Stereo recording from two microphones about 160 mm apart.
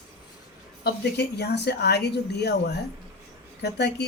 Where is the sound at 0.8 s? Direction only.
90° left.